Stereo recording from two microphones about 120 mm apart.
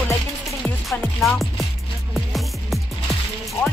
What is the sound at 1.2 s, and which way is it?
Music, centre (ahead or behind).